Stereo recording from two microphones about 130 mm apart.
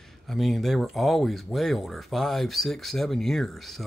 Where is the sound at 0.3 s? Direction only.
Centre (ahead or behind).